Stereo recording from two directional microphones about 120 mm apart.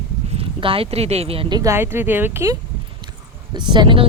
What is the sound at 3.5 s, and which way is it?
Speech, 40° right (ahead or behind).